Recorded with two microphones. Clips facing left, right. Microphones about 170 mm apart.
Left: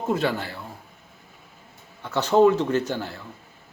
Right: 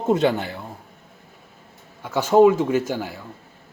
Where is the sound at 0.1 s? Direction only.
20° right (ahead or behind).